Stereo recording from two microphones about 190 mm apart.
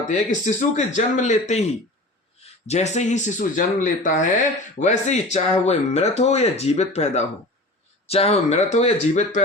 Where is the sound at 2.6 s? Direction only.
35° left (ahead or behind).